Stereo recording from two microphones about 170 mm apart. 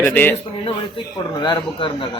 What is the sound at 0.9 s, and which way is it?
Speech, 25° left (ahead or behind).